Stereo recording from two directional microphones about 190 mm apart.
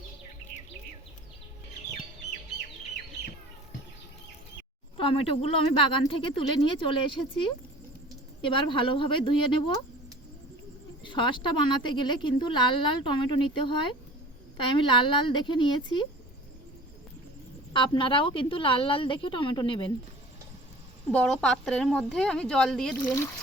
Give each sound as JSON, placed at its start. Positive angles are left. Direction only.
{"t": 4.9, "sound": "a woman's voice", "side_deg": 30}
{"t": 8.4, "sound": "a woman's voice", "side_deg": 25}
{"t": 11.0, "sound": "a woman's voice", "side_deg": 25}
{"t": 17.7, "sound": "a woman's voice", "side_deg": 25}
{"t": 21.1, "sound": "a woman's voice", "side_deg": 5}
{"t": 23.0, "sound": "speech", "side_deg": 15}